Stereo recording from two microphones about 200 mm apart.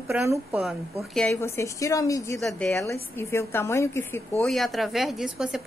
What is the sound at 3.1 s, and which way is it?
Speech, 15° left (ahead or behind).